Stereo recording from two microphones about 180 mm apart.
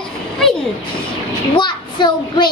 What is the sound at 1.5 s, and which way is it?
Speech, 25° left (ahead or behind).